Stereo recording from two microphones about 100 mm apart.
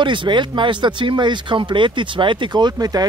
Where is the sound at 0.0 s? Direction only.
50° right (ahead or behind).